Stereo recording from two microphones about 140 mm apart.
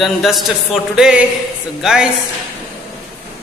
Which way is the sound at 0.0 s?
Centre (ahead or behind).